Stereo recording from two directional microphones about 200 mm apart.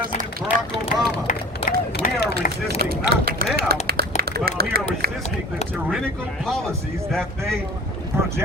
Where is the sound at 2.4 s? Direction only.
45° left (ahead or behind).